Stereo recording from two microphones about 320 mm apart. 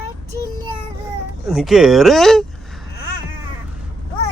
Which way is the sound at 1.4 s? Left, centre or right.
Centre.